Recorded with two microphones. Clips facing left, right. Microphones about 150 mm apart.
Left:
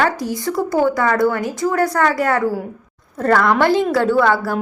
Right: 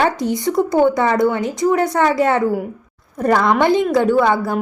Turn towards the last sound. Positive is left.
turn(degrees=-15)  # may be behind; listen again after turning